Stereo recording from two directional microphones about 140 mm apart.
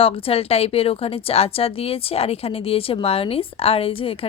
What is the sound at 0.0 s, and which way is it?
A woman's voice, 45° left (ahead or behind).